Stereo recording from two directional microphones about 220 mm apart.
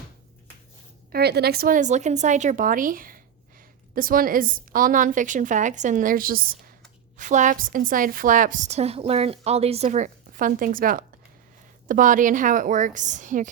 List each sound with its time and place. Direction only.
1.1 s a woman's voice: 45° right (ahead or behind)